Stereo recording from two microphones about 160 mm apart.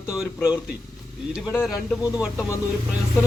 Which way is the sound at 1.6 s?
Centre (ahead or behind).